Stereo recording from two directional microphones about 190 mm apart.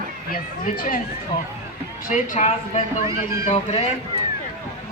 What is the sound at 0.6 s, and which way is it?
Speech, 45° left (ahead or behind).